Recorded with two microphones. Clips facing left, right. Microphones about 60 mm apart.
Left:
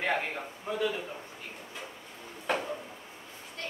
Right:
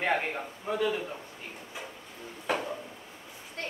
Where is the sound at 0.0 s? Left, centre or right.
Centre.